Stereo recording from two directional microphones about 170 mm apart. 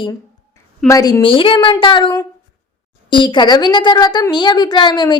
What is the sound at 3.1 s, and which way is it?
A woman's voice, 25° left (ahead or behind).